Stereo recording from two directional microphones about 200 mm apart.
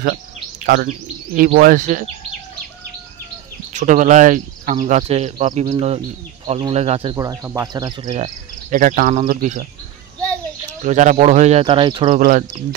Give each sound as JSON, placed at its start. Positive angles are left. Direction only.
{"t": 0.7, "sound": "speech", "side_deg": -40}
{"t": 3.7, "sound": "speech", "side_deg": -40}
{"t": 7.2, "sound": "speech", "side_deg": -15}
{"t": 8.1, "sound": "speech", "side_deg": -35}
{"t": 10.8, "sound": "speech", "side_deg": -35}
{"t": 12.2, "sound": "speech", "side_deg": -40}